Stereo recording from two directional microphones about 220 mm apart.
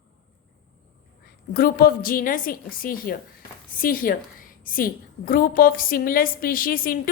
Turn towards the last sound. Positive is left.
turn(degrees=40)  # may be behind; listen again after turning